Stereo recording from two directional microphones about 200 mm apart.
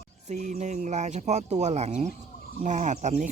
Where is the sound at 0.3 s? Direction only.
35° right (ahead or behind).